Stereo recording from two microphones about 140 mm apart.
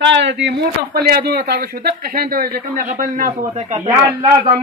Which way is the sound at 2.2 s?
90° right.